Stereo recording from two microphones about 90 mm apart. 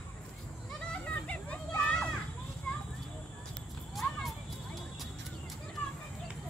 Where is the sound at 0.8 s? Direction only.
15° left (ahead or behind).